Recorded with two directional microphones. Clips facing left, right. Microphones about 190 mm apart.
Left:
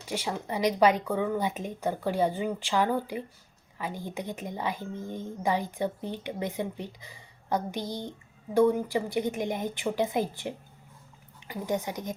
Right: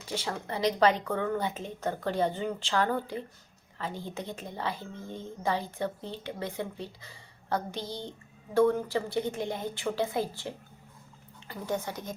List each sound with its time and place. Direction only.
0.1 s a woman's voice: 15° left (ahead or behind)